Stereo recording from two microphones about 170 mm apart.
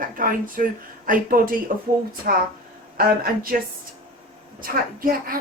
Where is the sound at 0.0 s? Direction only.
55° right (ahead or behind).